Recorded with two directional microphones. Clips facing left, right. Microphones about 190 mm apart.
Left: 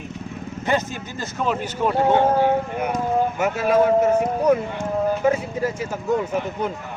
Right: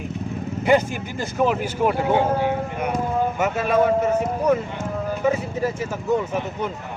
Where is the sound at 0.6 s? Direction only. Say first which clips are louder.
Right 5 dB; 10° right (ahead or behind).